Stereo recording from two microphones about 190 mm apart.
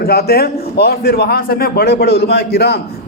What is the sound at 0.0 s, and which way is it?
A man's voice, 55° left (ahead or behind).